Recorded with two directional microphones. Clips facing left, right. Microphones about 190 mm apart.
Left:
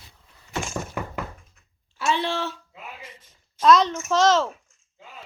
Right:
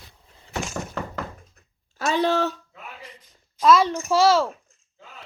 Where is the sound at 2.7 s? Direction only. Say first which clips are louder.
Even; 5° left (ahead or behind).